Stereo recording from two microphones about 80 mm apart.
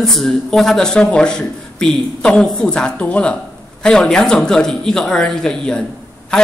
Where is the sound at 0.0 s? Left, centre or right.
Centre.